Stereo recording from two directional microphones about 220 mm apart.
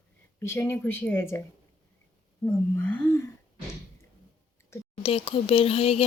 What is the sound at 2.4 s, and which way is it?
Speech, 5° left (ahead or behind).